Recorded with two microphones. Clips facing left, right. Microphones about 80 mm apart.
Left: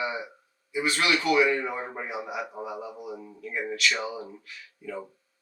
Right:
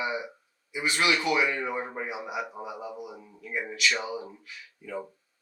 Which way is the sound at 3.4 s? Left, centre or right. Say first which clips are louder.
Left 1 dB; centre.